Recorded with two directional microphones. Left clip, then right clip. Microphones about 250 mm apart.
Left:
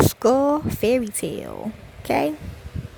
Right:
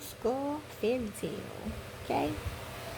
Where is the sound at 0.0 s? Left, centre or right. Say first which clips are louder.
Left 16 dB; left.